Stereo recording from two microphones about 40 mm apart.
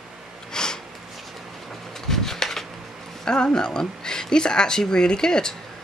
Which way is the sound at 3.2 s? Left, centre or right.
Centre.